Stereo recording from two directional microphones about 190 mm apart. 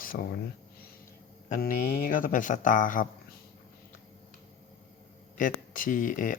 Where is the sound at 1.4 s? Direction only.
45° left (ahead or behind).